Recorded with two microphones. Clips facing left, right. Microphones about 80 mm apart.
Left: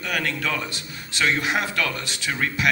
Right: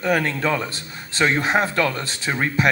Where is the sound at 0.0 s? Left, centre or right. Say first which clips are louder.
Right 6 dB; right.